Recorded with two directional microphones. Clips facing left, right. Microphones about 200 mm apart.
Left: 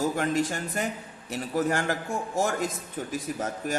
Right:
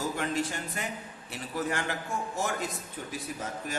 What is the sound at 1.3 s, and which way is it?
A man's voice, 45° left (ahead or behind).